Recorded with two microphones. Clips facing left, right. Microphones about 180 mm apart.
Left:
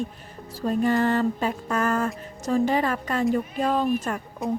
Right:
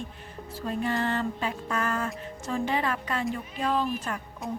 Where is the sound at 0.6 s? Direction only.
40° left (ahead or behind).